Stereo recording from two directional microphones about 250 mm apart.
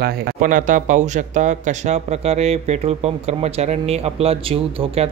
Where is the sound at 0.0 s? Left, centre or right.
Right.